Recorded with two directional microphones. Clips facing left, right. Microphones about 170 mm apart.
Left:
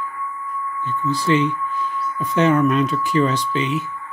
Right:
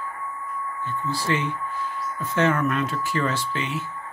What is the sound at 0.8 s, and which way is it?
Speech, 20° left (ahead or behind).